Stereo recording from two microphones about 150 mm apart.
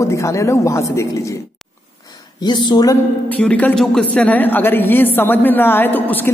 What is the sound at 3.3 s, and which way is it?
A woman's voice, 10° left (ahead or behind).